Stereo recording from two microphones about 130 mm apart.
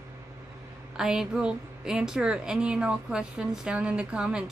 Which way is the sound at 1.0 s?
5° right (ahead or behind).